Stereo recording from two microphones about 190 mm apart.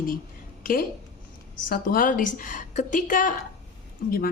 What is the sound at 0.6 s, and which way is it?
A woman's voice, 50° left (ahead or behind).